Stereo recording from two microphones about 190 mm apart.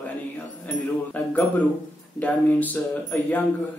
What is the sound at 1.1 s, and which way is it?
Speech, 10° left (ahead or behind).